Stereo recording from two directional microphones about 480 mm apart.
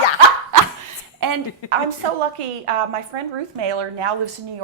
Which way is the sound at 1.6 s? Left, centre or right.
Left.